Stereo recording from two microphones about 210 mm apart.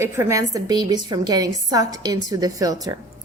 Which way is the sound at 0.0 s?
15° right (ahead or behind).